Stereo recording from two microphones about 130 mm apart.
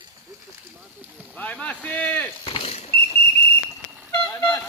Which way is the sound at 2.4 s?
45° left (ahead or behind).